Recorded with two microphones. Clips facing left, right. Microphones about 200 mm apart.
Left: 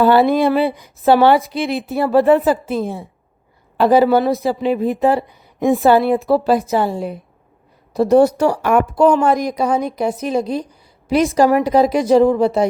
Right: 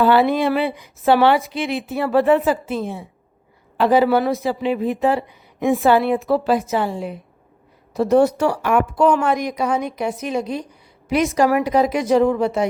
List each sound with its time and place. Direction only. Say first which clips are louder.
0.0 s speech: left 3 dB; 40° left (ahead or behind)